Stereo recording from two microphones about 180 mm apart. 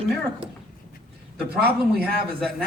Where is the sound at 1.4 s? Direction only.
60° right (ahead or behind).